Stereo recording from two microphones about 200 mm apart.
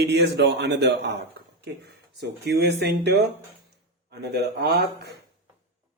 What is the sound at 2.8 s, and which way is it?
Speech, 55° right (ahead or behind).